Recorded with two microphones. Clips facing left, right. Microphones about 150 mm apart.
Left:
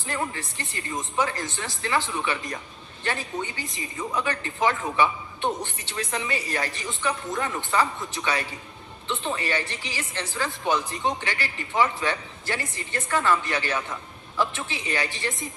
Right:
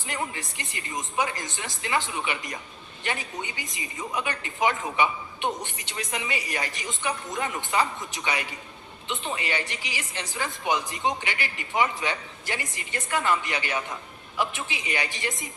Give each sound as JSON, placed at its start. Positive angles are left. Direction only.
{"t": 0.0, "sound": "a woman's voice", "side_deg": -15}